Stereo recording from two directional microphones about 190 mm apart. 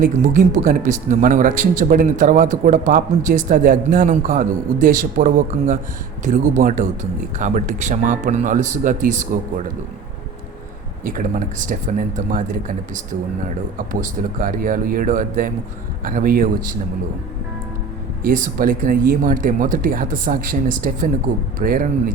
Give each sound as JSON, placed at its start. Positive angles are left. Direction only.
{"t": 0.0, "sound": "speech", "side_deg": -45}
{"t": 11.0, "sound": "speech", "side_deg": -45}
{"t": 18.2, "sound": "speech", "side_deg": -45}